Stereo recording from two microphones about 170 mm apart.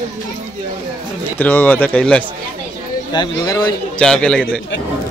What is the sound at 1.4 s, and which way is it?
Speech, 10° left (ahead or behind).